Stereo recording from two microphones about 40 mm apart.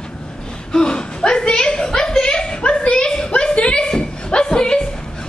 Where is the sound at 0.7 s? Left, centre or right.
Centre.